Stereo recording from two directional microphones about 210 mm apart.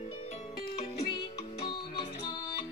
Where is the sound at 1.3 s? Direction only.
25° left (ahead or behind).